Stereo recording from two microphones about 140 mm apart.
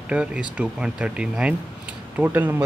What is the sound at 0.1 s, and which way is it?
Speech, 10° right (ahead or behind).